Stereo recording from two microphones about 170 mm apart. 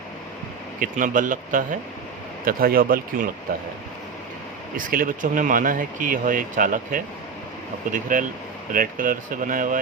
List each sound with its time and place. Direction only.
0.8 s speech: 50° right (ahead or behind)
4.9 s speech: 55° right (ahead or behind)